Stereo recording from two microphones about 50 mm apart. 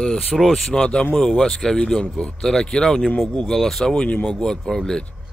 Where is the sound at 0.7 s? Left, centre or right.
Centre.